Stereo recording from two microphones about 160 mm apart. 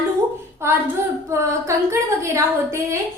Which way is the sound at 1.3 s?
20° right (ahead or behind).